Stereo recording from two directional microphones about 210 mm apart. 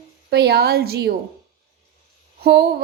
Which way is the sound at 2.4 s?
50° right (ahead or behind).